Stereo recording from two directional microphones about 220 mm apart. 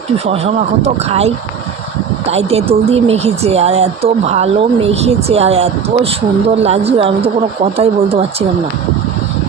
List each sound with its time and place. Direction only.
0.3 s speech: 25° right (ahead or behind)